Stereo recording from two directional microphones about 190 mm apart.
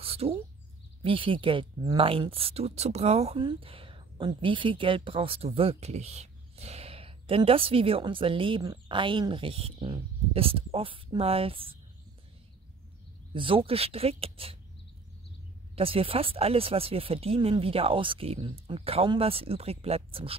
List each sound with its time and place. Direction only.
0.0 s bird: 30° right (ahead or behind)
1.0 s speech: 25° right (ahead or behind)
13.3 s speech: 25° right (ahead or behind)
15.7 s speech: 30° right (ahead or behind)